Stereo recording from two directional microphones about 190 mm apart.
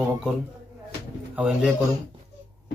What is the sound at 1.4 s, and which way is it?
Speech, 5° right (ahead or behind).